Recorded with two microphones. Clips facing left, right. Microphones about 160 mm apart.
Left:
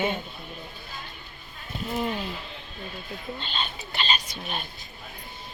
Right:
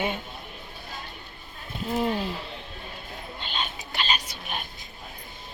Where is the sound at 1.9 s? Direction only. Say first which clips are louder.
Right 3 dB; 30° right (ahead or behind).